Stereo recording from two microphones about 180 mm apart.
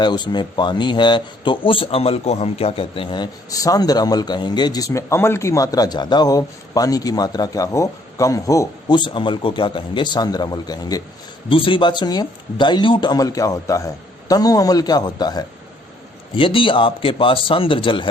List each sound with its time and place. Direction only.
0.0 s speech: 25° left (ahead or behind)